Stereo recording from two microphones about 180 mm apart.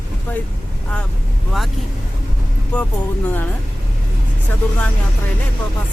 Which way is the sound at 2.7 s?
5° left (ahead or behind).